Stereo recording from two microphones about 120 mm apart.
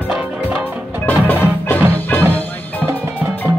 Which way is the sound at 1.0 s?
15° left (ahead or behind).